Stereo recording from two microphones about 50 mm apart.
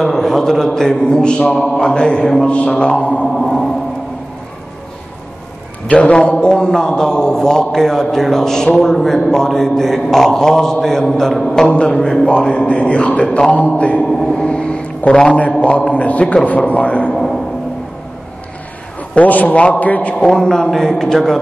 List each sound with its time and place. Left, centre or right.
0.0 s a man's voice: centre; by 3.3 s left
3.3 s music: centre
5.9 s a man's voice: left; by 11.6 s centre
11.6 s a man's voice: left
14.2 s a man's voice: centre
17.1 s a sound: centre
19.1 s a man's voice: left
20.2 s a man's voice: centre